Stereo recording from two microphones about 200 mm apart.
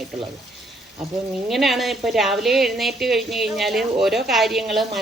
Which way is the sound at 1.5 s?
Centre (ahead or behind).